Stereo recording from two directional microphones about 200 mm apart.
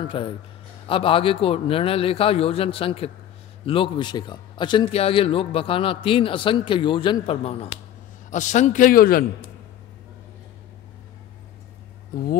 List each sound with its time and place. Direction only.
0.0 s a man's voice: 25° left (ahead or behind); by 9.2 s 45° left (ahead or behind)